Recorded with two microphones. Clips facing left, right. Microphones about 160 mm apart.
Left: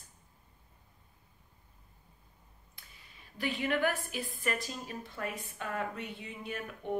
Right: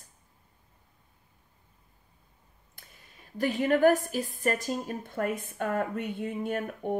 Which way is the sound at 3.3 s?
45° right (ahead or behind).